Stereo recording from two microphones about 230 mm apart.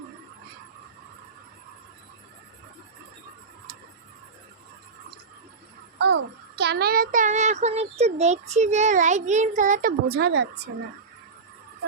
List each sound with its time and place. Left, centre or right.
6.0 s music: right
6.6 s a child's voice: right